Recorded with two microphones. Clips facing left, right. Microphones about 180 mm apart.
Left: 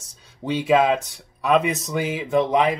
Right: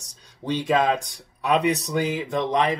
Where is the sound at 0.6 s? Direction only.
5° left (ahead or behind).